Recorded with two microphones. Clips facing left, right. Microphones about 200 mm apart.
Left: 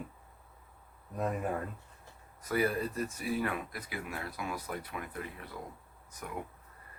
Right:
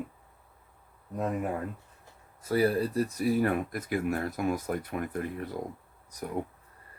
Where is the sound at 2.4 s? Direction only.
30° right (ahead or behind).